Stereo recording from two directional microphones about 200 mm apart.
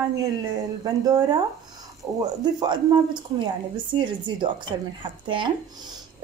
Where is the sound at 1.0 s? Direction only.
20° right (ahead or behind).